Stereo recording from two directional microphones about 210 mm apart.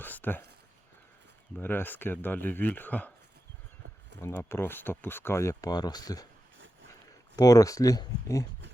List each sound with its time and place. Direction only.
0.0 s a sound: 10° left (ahead or behind)
1.5 s speech: 10° left (ahead or behind)
4.2 s speech: 10° left (ahead or behind)
7.3 s speech: 15° left (ahead or behind)